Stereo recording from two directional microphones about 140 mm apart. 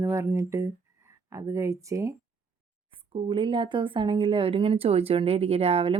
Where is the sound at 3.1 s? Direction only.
35° right (ahead or behind).